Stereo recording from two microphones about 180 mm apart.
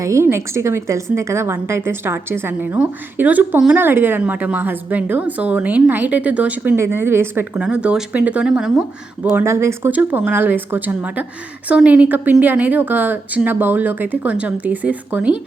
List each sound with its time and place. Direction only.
0.0 s a woman's voice: 15° right (ahead or behind)
9.3 s a woman's voice: 15° right (ahead or behind)